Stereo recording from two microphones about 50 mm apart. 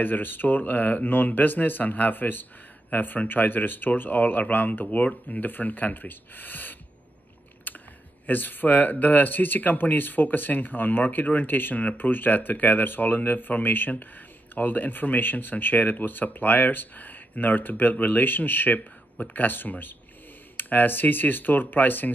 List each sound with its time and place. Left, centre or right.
0.0 s speech: left
7.7 s a sound: left
8.3 s speech: left